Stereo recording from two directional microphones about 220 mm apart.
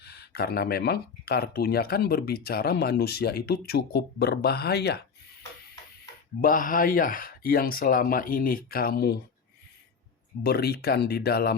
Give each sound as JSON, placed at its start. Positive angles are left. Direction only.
{"t": 0.0, "sound": "speech", "side_deg": 45}
{"t": 6.4, "sound": "speech", "side_deg": 40}
{"t": 10.4, "sound": "speech", "side_deg": 45}